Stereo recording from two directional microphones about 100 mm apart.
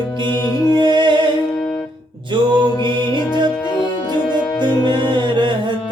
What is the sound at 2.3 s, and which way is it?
Mantra, 55° right (ahead or behind).